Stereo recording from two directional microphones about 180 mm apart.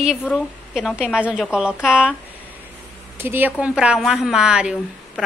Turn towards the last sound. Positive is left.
turn(degrees=-5)  # may be behind; listen again after turning